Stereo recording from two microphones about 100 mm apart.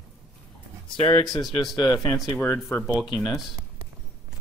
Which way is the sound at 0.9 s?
50° left (ahead or behind).